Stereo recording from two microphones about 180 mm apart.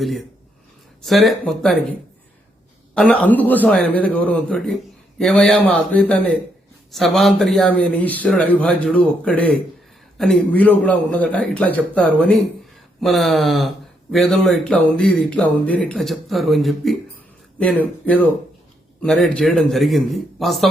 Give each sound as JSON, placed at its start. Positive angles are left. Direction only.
{"t": 0.0, "sound": "a man's voice", "side_deg": 0}
{"t": 2.9, "sound": "a man's voice", "side_deg": 5}